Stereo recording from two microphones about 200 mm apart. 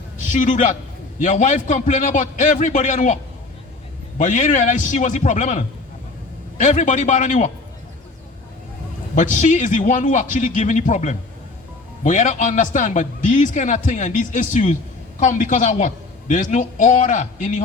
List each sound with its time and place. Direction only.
0.2 s a man's voice: 40° left (ahead or behind)
4.2 s a man's voice: 40° left (ahead or behind)
9.1 s a man's voice: 40° left (ahead or behind)